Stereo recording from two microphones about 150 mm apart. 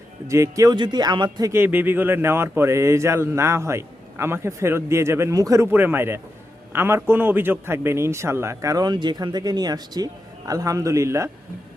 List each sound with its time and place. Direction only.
0.3 s a man's voice: 20° right (ahead or behind)